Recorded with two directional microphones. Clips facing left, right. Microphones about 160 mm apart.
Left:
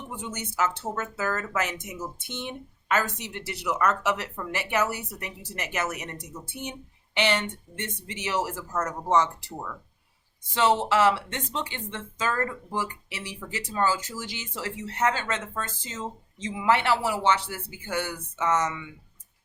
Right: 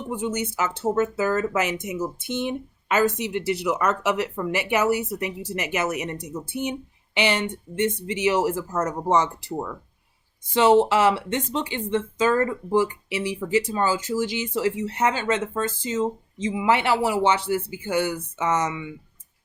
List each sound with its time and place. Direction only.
0.3 s speech: 10° right (ahead or behind)